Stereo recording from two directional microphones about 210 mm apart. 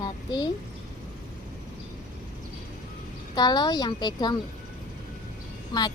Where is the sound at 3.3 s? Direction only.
20° left (ahead or behind).